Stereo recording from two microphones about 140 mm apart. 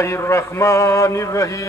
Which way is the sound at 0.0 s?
20° left (ahead or behind).